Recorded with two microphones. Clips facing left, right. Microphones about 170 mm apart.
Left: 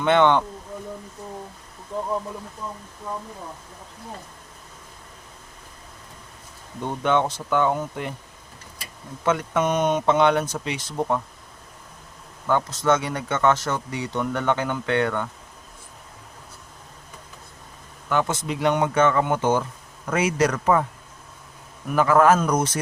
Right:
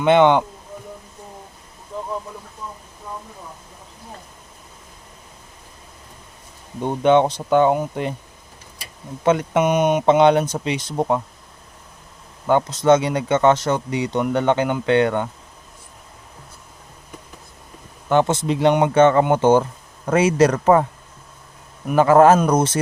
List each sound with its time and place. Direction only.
0.0 s speech: 15° right (ahead or behind)
6.8 s speech: 20° right (ahead or behind)
9.2 s speech: 20° right (ahead or behind)
12.5 s speech: 20° right (ahead or behind)
18.1 s speech: 25° right (ahead or behind)
21.8 s speech: 30° right (ahead or behind)